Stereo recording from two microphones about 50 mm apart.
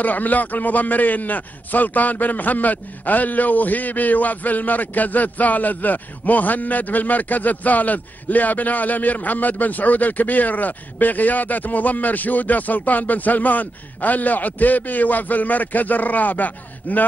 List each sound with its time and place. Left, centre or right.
0.0 s a man's voice: left